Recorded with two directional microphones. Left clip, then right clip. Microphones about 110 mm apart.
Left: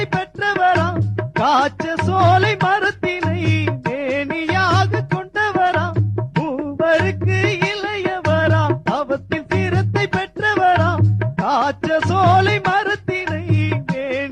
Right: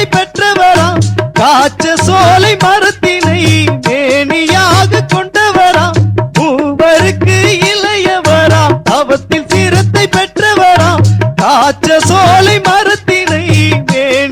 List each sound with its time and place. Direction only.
0.0 s music: 45° left (ahead or behind)
6.6 s music: 35° left (ahead or behind)